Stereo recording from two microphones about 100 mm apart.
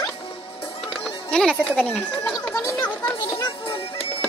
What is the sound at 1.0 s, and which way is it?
Speech, 5° left (ahead or behind).